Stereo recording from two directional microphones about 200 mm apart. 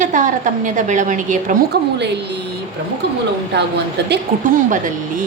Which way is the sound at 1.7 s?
55° right (ahead or behind).